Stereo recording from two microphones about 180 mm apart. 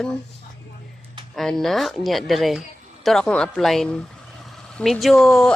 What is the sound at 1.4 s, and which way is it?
A woman's voice, centre (ahead or behind).